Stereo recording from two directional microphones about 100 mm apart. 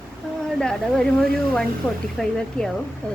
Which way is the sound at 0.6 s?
5° left (ahead or behind).